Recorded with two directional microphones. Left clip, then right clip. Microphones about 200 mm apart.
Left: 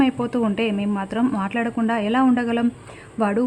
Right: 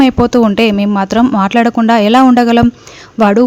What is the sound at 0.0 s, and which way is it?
A woman's voice, 30° right (ahead or behind).